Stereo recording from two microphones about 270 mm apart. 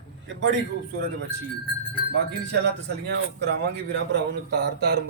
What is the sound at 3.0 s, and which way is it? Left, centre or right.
Speech, right.